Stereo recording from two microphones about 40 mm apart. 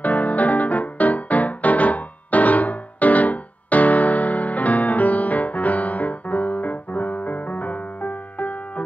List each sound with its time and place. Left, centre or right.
0.0 s music: left